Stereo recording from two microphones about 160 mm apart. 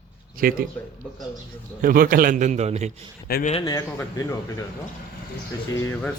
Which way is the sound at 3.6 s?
25° left (ahead or behind).